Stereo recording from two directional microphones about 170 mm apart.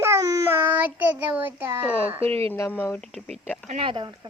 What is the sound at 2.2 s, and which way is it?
Speech, 35° right (ahead or behind).